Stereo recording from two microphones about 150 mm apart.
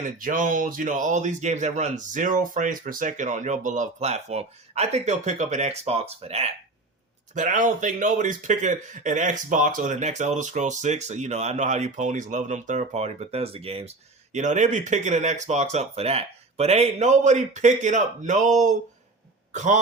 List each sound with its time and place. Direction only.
0.2 s speech: 60° right (ahead or behind); by 6.5 s 45° right (ahead or behind)
7.3 s speech: 55° right (ahead or behind); by 13.9 s 40° right (ahead or behind)
14.3 s speech: 50° right (ahead or behind)